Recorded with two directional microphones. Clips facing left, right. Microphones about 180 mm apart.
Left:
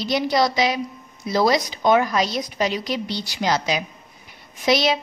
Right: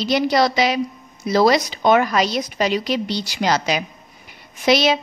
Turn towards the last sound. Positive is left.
turn(degrees=-75)  # may be behind; listen again after turning